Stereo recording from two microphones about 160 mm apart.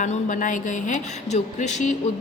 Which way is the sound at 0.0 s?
50° left (ahead or behind).